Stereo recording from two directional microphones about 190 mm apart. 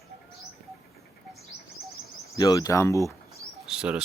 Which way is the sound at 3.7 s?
5° right (ahead or behind).